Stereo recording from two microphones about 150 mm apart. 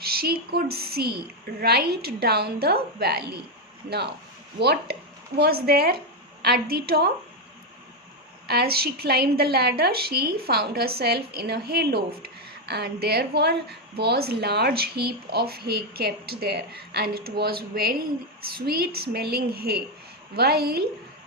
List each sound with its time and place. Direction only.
0.0 s a woman's voice: 90° right
8.4 s a woman's voice: 90° right